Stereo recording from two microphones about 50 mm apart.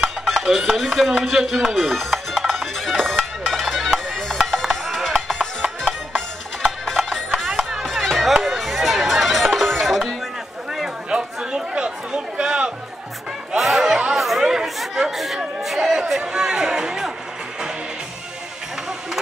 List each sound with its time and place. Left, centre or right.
0.2 s a sound: centre
0.7 s speech: centre
3.2 s music: centre
6.1 s music: centre
7.4 s chop: centre
8.3 s music: centre
11.1 s chatter: centre
13.6 s music: centre
14.1 s chatter: centre
16.1 s a sound: centre